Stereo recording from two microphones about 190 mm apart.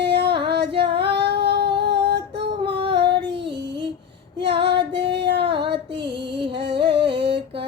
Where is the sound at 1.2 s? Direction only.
60° right (ahead or behind).